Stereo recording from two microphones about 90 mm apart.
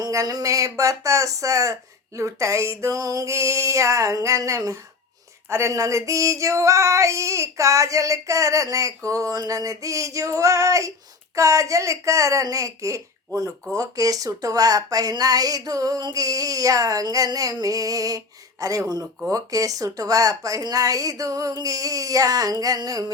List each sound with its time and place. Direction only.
0.0 s speech: 40° right (ahead or behind)